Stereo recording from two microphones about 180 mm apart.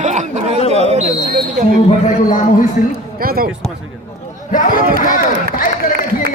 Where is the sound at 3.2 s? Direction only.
55° right (ahead or behind).